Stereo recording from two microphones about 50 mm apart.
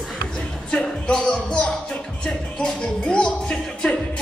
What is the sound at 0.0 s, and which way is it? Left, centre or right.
Music, centre.